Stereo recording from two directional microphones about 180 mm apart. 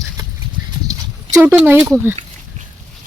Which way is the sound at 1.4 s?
10° right (ahead or behind).